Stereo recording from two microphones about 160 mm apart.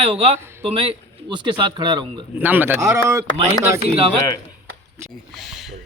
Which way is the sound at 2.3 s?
10° right (ahead or behind).